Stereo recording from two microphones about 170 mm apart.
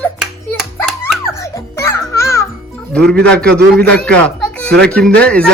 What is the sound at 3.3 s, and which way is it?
Speech, 5° left (ahead or behind).